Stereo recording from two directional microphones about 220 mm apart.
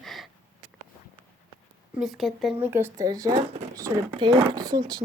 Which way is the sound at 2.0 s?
Centre (ahead or behind).